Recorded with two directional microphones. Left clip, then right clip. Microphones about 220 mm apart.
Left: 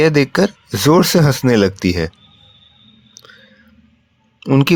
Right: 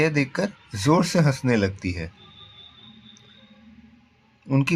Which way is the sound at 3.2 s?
40° left (ahead or behind).